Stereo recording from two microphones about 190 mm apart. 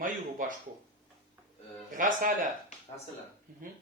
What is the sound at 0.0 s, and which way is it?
Speech, 45° right (ahead or behind).